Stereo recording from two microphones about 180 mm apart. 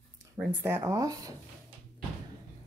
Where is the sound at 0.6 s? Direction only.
15° right (ahead or behind).